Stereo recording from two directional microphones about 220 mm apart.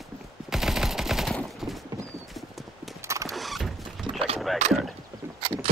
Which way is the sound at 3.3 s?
Centre (ahead or behind).